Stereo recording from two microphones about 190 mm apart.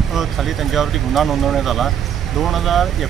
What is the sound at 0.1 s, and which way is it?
Speech, centre (ahead or behind).